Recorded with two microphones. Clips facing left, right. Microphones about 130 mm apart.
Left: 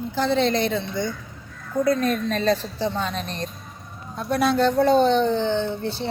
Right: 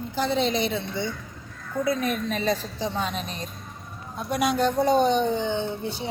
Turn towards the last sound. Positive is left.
turn(degrees=-10)  # may be behind; listen again after turning